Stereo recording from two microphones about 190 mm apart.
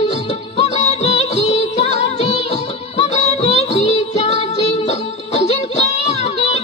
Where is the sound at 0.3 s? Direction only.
35° left (ahead or behind).